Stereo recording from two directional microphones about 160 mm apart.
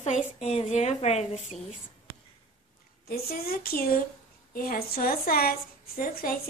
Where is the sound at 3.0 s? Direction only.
70° left (ahead or behind).